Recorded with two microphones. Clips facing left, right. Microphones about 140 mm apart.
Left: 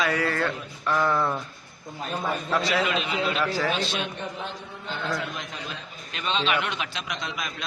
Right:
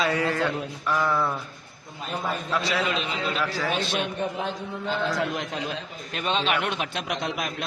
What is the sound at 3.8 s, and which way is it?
Speech, 55° right (ahead or behind).